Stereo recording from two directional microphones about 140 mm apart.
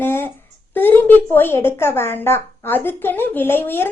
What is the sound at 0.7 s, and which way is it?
A woman's voice, 15° left (ahead or behind).